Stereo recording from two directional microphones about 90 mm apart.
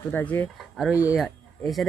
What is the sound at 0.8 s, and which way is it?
Speech, centre (ahead or behind).